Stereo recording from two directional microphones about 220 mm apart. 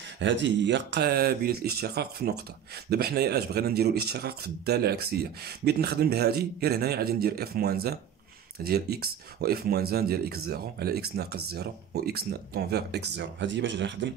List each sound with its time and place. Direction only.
0.2 s speech: 55° right (ahead or behind)